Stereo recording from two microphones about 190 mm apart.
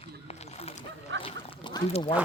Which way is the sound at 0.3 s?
30° left (ahead or behind).